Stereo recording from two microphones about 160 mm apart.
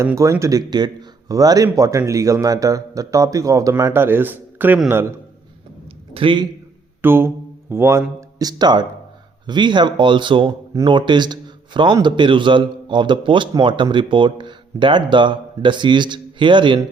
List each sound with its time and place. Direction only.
0.0 s a man's voice: 20° right (ahead or behind)
6.1 s a man's voice: 30° right (ahead or behind)
7.0 s a sound: 15° right (ahead or behind)
7.7 s a man's voice: 15° right (ahead or behind)